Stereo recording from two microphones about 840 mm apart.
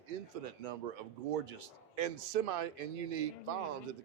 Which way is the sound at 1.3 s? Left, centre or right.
Right.